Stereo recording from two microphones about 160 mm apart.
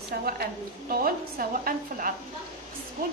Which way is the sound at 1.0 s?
60° right (ahead or behind).